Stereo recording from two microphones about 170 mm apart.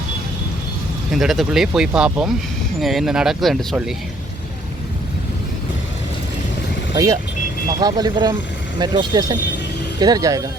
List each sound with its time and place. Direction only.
1.1 s speech: centre (ahead or behind)
6.9 s speech: 20° right (ahead or behind)